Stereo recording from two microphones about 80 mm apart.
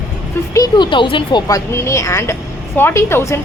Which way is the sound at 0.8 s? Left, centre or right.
Left.